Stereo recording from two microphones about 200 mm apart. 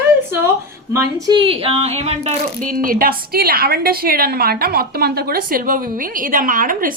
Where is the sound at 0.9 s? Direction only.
25° right (ahead or behind).